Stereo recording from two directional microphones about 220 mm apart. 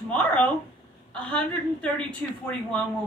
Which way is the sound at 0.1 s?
5° left (ahead or behind).